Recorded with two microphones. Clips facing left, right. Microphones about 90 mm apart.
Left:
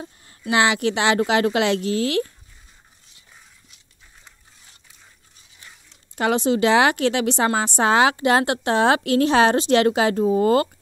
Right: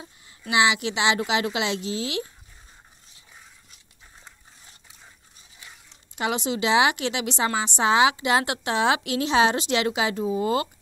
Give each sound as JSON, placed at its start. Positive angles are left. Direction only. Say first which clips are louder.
{"t": 0.0, "sound": "a woman's voice", "louder": "left 7 dB", "side_deg": 45}
{"t": 6.1, "sound": "a woman's voice", "louder": "left 7 dB", "side_deg": 45}